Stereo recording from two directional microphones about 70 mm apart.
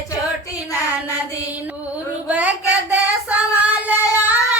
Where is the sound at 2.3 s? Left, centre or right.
Right.